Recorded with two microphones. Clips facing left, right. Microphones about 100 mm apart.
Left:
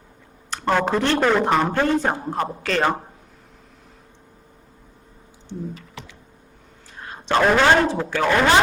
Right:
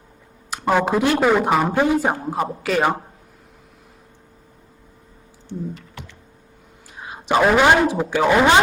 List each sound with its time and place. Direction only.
0.5 s a woman's voice: 10° right (ahead or behind)
5.7 s computer keyboard: centre (ahead or behind)
6.9 s a woman's voice: 10° right (ahead or behind)